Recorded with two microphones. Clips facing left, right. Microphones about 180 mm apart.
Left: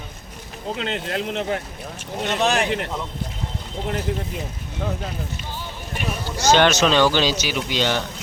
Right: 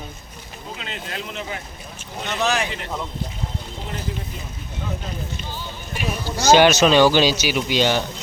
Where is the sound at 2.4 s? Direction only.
55° left (ahead or behind).